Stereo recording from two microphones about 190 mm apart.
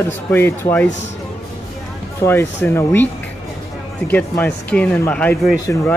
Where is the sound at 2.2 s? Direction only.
15° left (ahead or behind).